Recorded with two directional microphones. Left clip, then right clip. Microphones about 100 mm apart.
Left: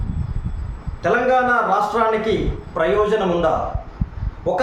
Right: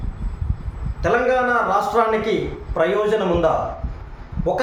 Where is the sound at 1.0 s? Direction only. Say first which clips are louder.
Left 1 dB; 10° right (ahead or behind).